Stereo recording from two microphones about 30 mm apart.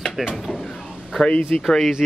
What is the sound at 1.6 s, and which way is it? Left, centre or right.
Speech, centre.